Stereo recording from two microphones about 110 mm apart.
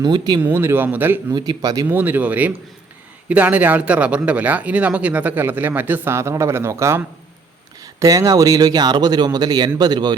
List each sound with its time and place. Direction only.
0.0 s speech: 40° right (ahead or behind)
0.4 s speech: 20° right (ahead or behind)
1.3 s speech: 40° right (ahead or behind)
1.9 s speech: 15° right (ahead or behind); by 10.2 s 40° right (ahead or behind)